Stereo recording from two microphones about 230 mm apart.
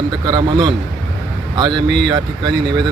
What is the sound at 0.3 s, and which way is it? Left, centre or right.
Speech, centre.